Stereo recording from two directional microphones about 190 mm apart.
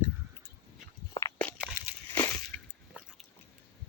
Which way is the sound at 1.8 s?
15° right (ahead or behind).